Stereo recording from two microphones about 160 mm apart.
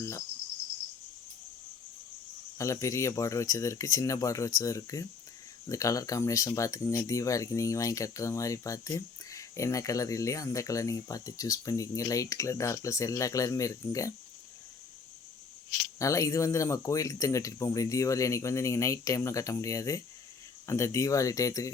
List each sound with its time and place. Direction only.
2.6 s speech: 20° left (ahead or behind)
16.0 s speech: 20° left (ahead or behind)